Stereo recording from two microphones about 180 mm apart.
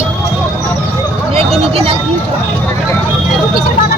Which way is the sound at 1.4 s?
30° right (ahead or behind).